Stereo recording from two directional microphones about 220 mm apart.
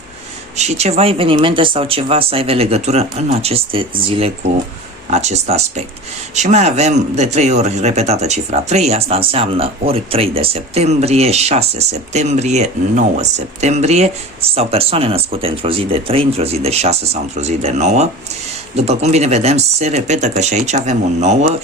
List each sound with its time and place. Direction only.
0.5 s speech: 30° right (ahead or behind)